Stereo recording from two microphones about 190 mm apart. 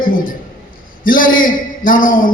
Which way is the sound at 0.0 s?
45° left (ahead or behind).